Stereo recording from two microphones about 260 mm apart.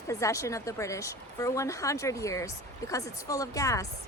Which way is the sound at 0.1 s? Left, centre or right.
Centre.